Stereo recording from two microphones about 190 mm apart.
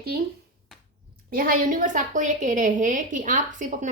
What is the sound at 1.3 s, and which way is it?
A woman's voice, 50° right (ahead or behind).